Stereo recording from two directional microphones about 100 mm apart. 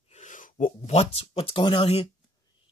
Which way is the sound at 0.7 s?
80° left.